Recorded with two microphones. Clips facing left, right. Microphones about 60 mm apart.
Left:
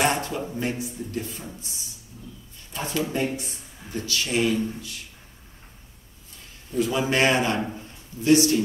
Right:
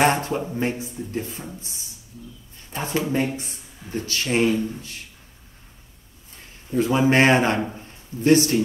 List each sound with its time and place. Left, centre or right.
0.0 s a sound: right
0.6 s speech: right
6.7 s speech: right